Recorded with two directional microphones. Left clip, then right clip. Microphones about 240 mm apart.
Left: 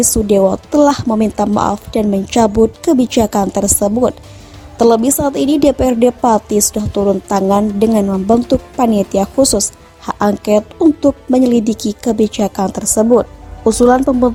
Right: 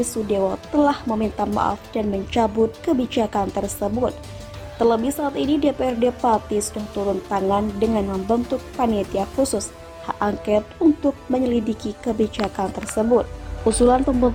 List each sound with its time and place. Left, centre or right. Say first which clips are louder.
0.3 s a woman's voice: left 11 dB; left